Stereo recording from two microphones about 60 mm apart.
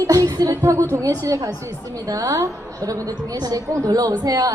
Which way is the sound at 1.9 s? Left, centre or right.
Right.